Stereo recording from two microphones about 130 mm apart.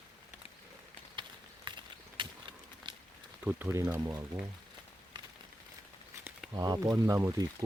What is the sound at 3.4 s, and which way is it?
Speech, 15° right (ahead or behind).